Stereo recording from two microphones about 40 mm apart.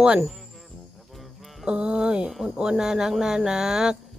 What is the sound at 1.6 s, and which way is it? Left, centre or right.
Speech, right.